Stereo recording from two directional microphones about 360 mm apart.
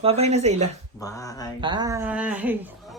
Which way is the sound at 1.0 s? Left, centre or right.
Centre.